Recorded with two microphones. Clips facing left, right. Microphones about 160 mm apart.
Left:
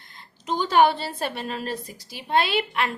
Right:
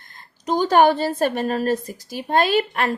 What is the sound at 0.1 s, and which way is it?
A woman's voice, 40° right (ahead or behind).